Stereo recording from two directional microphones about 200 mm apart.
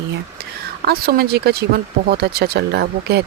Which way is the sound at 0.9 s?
50° right (ahead or behind).